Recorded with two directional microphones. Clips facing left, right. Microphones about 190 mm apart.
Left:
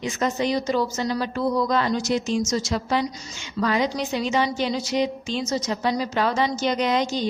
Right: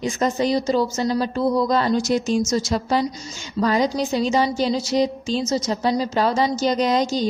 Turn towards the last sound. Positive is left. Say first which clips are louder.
# right 3 dB
turn(degrees=-40)  # may be behind; listen again after turning